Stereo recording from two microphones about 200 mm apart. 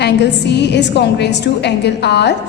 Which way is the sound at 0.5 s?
60° left (ahead or behind).